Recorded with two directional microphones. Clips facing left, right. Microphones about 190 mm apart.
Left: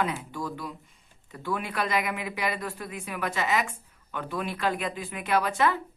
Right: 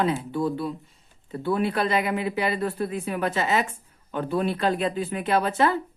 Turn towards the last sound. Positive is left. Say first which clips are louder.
# right 3 dB
turn(degrees=-35)  # may be behind; listen again after turning